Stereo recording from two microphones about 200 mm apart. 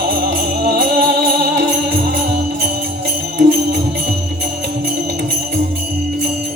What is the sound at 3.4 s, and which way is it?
Music, 55° right (ahead or behind).